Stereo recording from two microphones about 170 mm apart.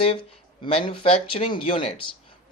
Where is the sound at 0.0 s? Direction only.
30° left (ahead or behind).